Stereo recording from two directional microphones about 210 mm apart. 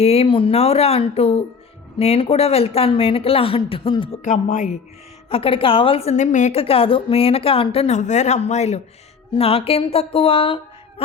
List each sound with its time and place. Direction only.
0.0 s a woman's voice: 30° left (ahead or behind)
5.3 s a woman's voice: 25° left (ahead or behind)